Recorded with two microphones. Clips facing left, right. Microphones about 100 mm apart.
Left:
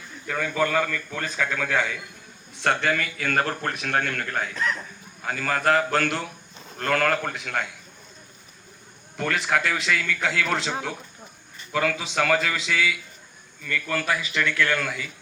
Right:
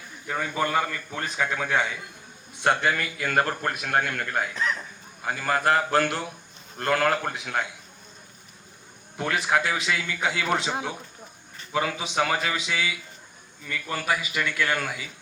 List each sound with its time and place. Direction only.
0.3 s a man's voice: 20° right (ahead or behind)
9.1 s a man's voice: 10° right (ahead or behind)